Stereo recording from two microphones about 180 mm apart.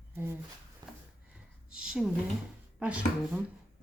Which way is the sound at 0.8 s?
25° right (ahead or behind).